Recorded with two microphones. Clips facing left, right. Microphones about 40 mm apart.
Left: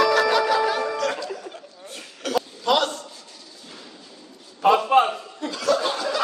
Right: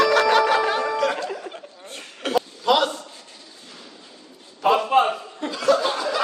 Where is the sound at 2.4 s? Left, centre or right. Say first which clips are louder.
Right 2 dB; centre.